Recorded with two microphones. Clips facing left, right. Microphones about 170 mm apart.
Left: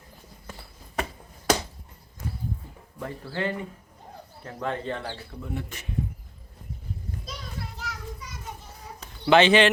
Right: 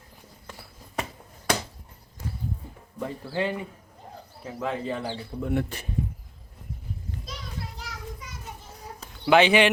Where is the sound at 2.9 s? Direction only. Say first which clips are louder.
Right 3 dB; 15° right (ahead or behind).